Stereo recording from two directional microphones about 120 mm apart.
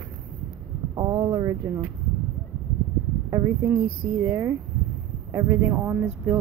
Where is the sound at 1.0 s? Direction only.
30° right (ahead or behind).